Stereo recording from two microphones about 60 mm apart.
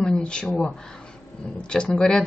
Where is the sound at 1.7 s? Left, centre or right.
Centre.